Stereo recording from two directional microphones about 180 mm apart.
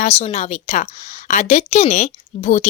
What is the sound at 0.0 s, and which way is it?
A woman's voice, 35° left (ahead or behind).